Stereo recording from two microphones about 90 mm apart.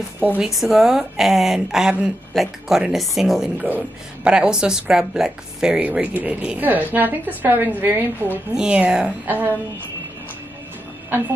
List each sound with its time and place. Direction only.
0.4 s speech: 5° right (ahead or behind)
3.6 s speech: 20° right (ahead or behind)
4.3 s a woman's voice: 10° right (ahead or behind)
5.8 s a woman's voice: 20° right (ahead or behind)